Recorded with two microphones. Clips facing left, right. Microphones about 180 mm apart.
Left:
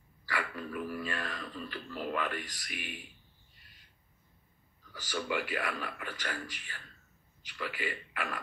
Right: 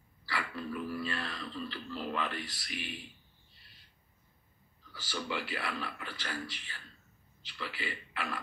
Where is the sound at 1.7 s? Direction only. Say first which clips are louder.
Left 5 dB; 45° left (ahead or behind).